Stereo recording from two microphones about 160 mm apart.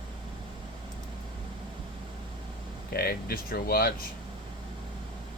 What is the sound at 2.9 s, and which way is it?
Speech, 70° left (ahead or behind).